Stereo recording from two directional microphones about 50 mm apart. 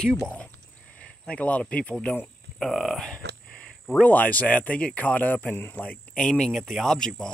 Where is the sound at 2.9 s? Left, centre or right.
Centre.